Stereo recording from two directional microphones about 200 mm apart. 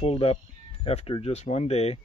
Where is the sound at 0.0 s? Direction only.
30° left (ahead or behind).